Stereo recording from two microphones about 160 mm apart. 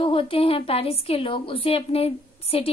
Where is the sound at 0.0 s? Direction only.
35° left (ahead or behind).